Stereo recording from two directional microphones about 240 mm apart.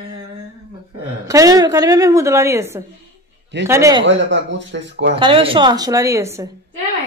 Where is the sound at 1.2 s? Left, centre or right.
Centre.